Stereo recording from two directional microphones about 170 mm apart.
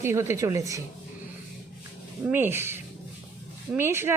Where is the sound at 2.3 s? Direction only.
10° right (ahead or behind).